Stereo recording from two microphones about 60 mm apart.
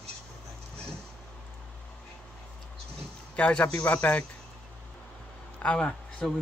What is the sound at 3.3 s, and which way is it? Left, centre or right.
Speech, left.